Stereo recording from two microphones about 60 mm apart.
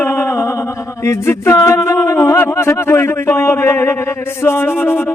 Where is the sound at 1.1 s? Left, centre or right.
Left.